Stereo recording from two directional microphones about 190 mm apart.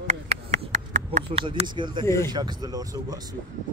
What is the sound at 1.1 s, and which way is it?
Speech, 30° right (ahead or behind).